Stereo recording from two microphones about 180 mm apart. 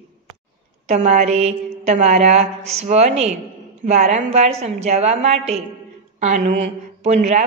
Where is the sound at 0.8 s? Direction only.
40° right (ahead or behind).